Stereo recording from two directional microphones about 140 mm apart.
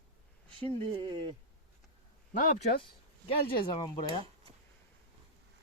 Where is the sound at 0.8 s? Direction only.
40° right (ahead or behind).